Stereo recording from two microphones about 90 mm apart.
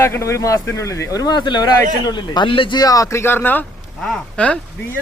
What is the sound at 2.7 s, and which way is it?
Speech, 45° left (ahead or behind).